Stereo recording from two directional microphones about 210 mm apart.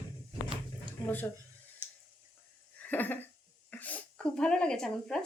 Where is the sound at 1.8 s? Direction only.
10° right (ahead or behind).